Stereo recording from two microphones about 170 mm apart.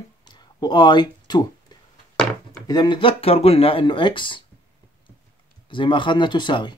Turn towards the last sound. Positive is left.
turn(degrees=25)  # may be behind; listen again after turning